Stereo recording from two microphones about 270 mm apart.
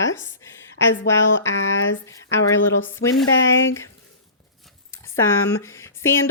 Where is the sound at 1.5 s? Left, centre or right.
Left.